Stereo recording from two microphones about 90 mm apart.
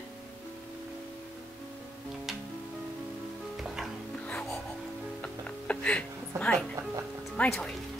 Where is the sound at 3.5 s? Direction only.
5° right (ahead or behind).